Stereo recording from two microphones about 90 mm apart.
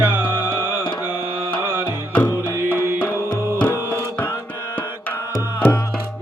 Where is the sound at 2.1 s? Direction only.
20° left (ahead or behind).